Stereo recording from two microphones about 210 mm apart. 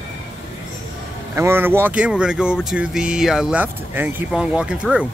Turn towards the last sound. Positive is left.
turn(degrees=-5)  # may be behind; listen again after turning